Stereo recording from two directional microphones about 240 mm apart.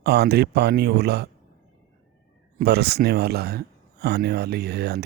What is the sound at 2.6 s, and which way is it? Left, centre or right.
Speech, right.